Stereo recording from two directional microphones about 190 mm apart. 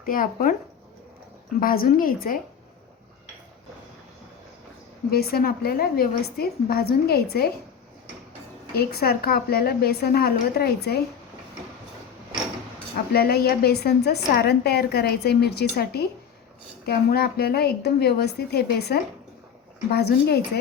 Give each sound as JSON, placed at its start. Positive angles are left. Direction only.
{"t": 0.0, "sound": "a woman's voice", "side_deg": 50}
{"t": 1.5, "sound": "a woman's voice", "side_deg": 50}
{"t": 5.1, "sound": "a woman's voice", "side_deg": 55}
{"t": 8.7, "sound": "a woman's voice", "side_deg": 55}
{"t": 13.1, "sound": "a woman's voice", "side_deg": 55}